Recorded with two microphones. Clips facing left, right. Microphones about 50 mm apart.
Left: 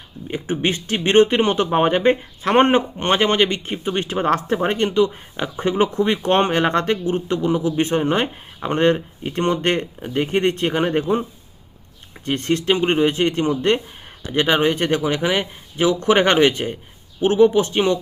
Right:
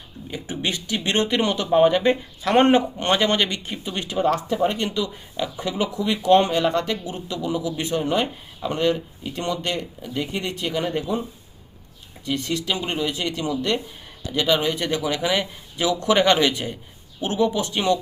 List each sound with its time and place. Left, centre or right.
0.3 s speech: left